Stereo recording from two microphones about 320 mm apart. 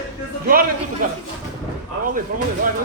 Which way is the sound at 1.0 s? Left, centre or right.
Right.